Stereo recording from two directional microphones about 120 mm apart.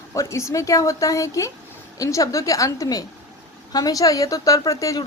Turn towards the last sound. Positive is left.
turn(degrees=30)  # may be behind; listen again after turning